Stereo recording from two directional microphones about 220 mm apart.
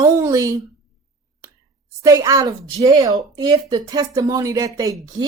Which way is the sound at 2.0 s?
15° right (ahead or behind).